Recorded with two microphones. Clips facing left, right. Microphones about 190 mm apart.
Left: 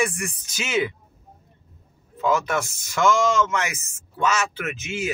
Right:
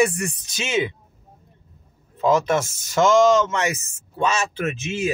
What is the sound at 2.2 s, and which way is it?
Speech, 35° right (ahead or behind).